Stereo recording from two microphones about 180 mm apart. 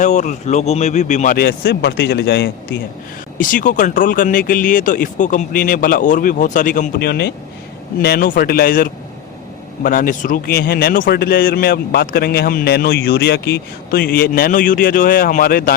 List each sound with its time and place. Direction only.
0.0 s speech: 40° left (ahead or behind); by 2.7 s 70° left (ahead or behind)
3.3 s a man's voice: 45° left (ahead or behind)